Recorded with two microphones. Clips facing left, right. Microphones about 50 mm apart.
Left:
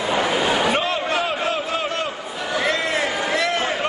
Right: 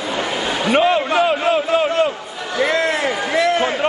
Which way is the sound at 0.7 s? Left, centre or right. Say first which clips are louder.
Right 6 dB; centre.